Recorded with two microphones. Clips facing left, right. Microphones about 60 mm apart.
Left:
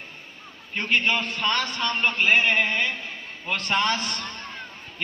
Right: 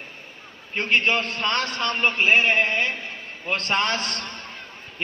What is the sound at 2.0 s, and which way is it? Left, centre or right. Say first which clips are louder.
Speech: right 2 dB; centre.